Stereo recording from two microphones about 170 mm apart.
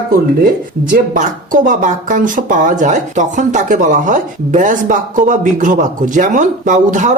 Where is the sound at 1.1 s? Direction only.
50° right (ahead or behind).